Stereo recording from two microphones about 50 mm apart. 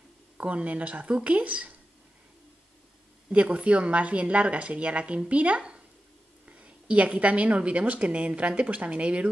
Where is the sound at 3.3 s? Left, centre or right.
Right.